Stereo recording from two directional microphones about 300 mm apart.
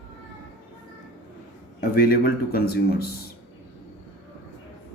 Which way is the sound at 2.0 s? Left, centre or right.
Left.